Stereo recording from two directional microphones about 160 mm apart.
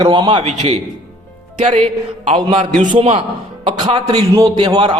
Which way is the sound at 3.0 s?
35° right (ahead or behind).